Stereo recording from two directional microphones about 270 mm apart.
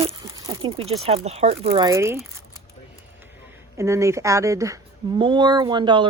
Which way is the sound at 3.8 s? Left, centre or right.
Centre.